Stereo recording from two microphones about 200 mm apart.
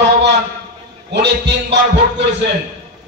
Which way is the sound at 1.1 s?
55° right (ahead or behind).